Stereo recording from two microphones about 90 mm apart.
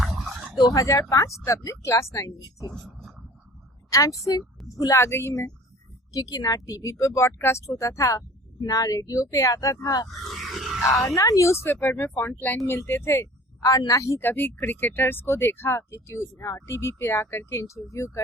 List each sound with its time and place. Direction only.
0.0 s a sound: 5° right (ahead or behind)
0.6 s speech: 40° left (ahead or behind)
3.8 s speech: 35° left (ahead or behind)
6.1 s speech: 45° left (ahead or behind)
10.2 s grunt: centre (ahead or behind)
11.1 s speech: 35° left (ahead or behind)